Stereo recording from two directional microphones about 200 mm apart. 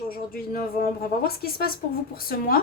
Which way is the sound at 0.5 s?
50° left (ahead or behind).